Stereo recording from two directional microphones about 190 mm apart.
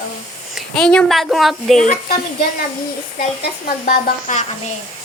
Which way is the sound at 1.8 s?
45° left (ahead or behind).